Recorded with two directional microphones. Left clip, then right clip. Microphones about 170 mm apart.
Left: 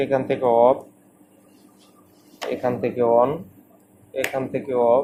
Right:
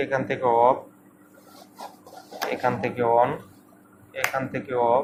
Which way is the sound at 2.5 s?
55° left (ahead or behind).